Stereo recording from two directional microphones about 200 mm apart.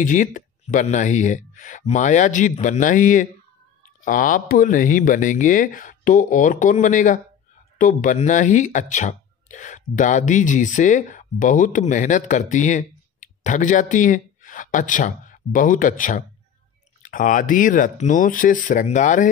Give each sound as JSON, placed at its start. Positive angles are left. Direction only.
{"t": 0.0, "sound": "speech", "side_deg": 40}